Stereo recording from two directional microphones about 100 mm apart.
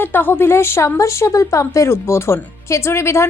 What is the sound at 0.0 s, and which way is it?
Speech, 20° left (ahead or behind).